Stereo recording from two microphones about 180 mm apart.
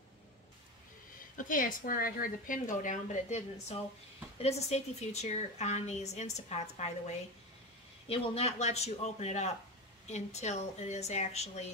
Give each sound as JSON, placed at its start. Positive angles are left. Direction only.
{"t": 1.3, "sound": "a woman's voice", "side_deg": 50}